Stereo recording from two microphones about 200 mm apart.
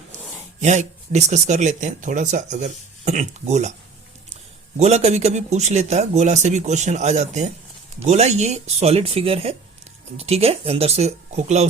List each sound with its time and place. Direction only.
0.6 s speech: 35° right (ahead or behind)
4.8 s speech: 30° right (ahead or behind)